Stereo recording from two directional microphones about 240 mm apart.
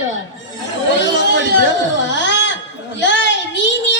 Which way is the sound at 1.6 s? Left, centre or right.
Left.